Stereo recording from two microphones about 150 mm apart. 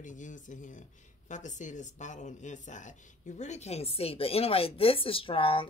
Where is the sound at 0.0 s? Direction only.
55° left (ahead or behind).